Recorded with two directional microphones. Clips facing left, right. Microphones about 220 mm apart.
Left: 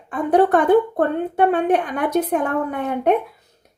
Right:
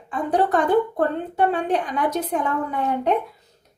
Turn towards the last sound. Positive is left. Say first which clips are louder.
# left 3 dB
turn(degrees=60)  # may be behind; listen again after turning